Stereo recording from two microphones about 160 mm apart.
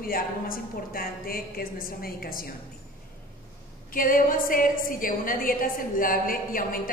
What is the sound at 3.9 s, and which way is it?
A woman's voice, 60° left (ahead or behind).